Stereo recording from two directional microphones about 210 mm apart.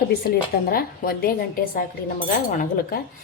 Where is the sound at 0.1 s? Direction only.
45° left (ahead or behind).